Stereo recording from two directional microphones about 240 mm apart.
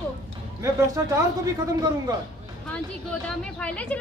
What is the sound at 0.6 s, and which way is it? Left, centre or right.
A woman's voice, centre.